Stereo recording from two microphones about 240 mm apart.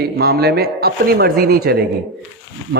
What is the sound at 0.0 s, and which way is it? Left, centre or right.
A man's voice, right.